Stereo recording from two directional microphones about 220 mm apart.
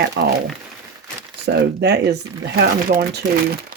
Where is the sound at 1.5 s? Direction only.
50° right (ahead or behind).